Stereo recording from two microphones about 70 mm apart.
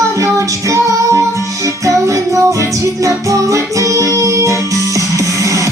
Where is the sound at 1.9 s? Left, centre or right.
Right.